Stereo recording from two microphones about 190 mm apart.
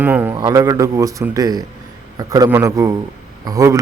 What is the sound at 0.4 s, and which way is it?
A man's voice, 20° right (ahead or behind).